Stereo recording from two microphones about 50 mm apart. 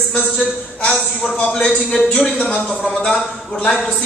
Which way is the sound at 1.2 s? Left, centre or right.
Centre.